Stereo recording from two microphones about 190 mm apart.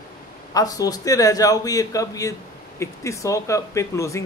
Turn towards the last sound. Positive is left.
turn(degrees=15)  # may be behind; listen again after turning